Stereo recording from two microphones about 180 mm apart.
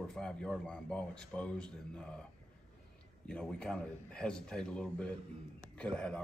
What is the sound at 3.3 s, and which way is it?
Speech, 5° left (ahead or behind).